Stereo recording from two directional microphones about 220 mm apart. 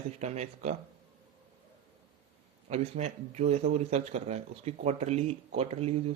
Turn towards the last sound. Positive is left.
turn(degrees=-30)  # may be behind; listen again after turning